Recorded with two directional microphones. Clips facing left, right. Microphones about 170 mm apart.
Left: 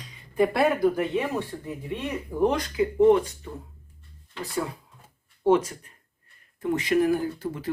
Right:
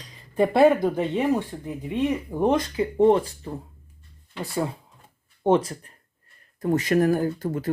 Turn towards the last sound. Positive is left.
turn(degrees=-45)  # may be behind; listen again after turning